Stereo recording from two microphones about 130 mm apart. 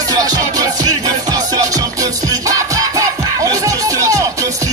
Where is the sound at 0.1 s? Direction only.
30° right (ahead or behind).